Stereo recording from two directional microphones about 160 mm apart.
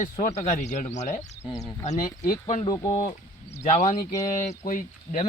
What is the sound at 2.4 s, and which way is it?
Speech, 45° left (ahead or behind).